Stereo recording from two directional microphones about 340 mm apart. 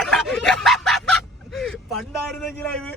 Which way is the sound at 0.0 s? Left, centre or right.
Centre.